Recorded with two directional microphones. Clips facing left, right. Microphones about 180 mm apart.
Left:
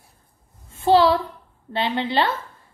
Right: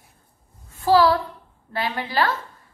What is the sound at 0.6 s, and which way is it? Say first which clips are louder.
A woman's voice: left 1 dB; 25° left (ahead or behind).